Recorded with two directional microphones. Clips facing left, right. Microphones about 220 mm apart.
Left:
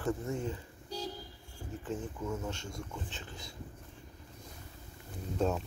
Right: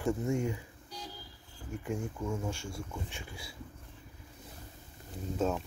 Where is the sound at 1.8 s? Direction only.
10° right (ahead or behind).